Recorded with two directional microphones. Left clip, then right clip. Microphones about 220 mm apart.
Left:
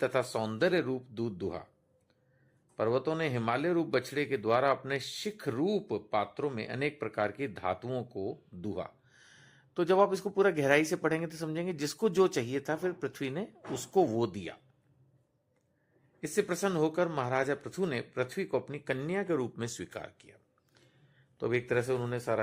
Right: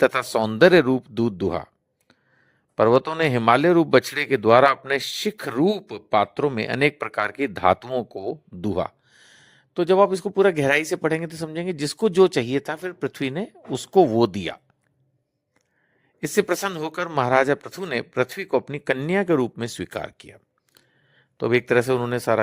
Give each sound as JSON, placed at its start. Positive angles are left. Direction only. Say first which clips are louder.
{"t": 0.0, "sound": "speech", "louder": "right 11 dB", "side_deg": -45}
{"t": 16.2, "sound": "speech", "louder": "right 9 dB", "side_deg": -40}